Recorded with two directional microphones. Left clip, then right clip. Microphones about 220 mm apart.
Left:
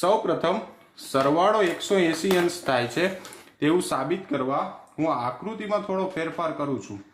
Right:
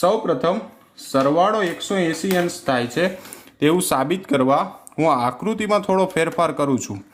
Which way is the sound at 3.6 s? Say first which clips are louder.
Right 5 dB; 30° right (ahead or behind).